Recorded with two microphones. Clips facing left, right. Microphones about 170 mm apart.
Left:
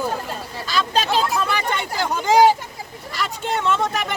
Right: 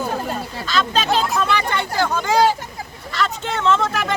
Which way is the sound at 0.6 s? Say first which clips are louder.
Right 1 dB; 10° left (ahead or behind).